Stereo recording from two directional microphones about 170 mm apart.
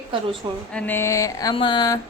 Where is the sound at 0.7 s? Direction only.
10° left (ahead or behind); by 2.0 s 25° left (ahead or behind).